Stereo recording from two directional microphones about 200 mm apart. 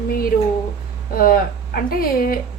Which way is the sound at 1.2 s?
45° left (ahead or behind).